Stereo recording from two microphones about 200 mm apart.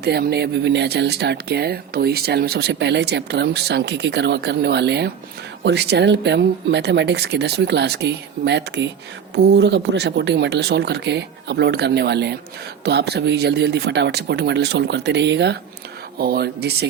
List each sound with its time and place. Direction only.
0.0 s speech: 55° right (ahead or behind)